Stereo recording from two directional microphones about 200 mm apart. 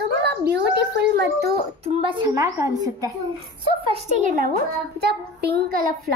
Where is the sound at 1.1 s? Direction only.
55° right (ahead or behind).